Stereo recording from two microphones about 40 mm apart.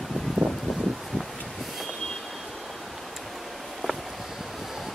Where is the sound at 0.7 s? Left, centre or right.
Centre.